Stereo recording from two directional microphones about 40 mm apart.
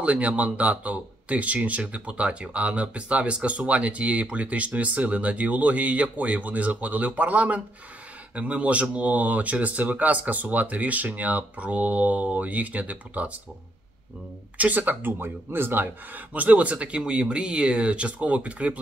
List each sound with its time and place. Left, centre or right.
0.0 s speech: right
14.6 s speech: right
15.0 s speech: right
16.3 s speech: right